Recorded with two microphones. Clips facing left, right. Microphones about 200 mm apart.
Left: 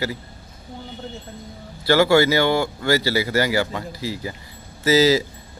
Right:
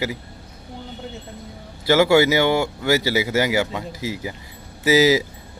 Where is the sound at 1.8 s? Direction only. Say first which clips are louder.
Right 1 dB; 15° right (ahead or behind).